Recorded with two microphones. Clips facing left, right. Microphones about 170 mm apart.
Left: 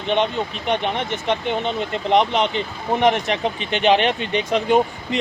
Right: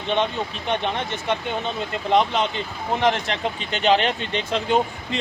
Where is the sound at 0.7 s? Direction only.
15° left (ahead or behind).